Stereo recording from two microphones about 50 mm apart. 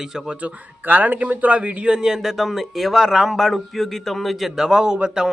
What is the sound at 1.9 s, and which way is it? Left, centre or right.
Speech, centre.